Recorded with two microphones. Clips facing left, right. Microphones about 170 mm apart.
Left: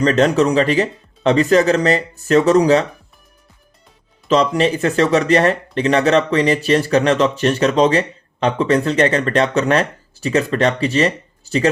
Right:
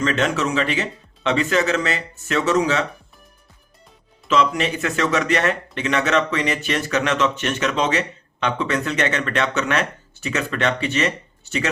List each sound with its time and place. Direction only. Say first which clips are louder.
0.0 s speech: left 7 dB; 40° left (ahead or behind)
4.3 s speech: left 5 dB; 35° left (ahead or behind)